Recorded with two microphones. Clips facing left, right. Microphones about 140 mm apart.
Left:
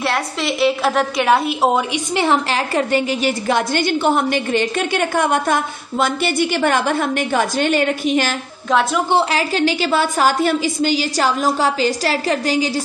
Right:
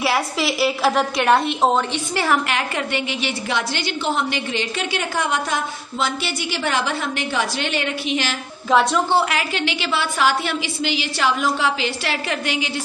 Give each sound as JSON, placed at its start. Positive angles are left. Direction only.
{"t": 0.0, "sound": "a woman's voice", "side_deg": -5}
{"t": 2.1, "sound": "a woman's voice", "side_deg": 25}
{"t": 2.7, "sound": "a woman's voice", "side_deg": 40}
{"t": 8.6, "sound": "a woman's voice", "side_deg": 0}
{"t": 9.3, "sound": "a woman's voice", "side_deg": 35}